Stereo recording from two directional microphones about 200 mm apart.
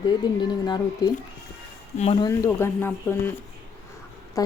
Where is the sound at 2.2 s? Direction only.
15° left (ahead or behind).